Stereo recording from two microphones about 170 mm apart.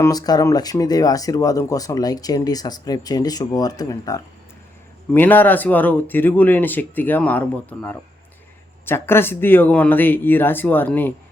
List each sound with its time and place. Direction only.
0.0 s speech: 20° left (ahead or behind)